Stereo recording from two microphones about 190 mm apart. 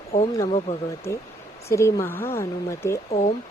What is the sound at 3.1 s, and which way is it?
Speech, 35° left (ahead or behind).